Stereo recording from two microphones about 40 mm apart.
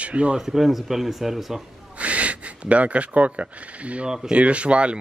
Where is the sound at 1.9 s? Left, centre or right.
Right.